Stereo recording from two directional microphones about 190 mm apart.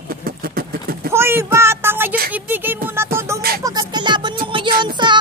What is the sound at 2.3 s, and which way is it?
Music, 10° right (ahead or behind).